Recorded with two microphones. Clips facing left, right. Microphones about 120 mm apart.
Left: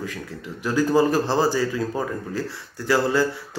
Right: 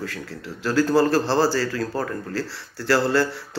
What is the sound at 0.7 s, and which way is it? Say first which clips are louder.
A man's voice: even; 15° left (ahead or behind).